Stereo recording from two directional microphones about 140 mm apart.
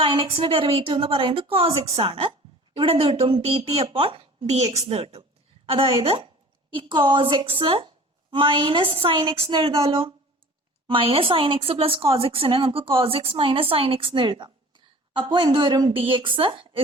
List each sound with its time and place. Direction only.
0.0 s a woman's voice: 40° right (ahead or behind)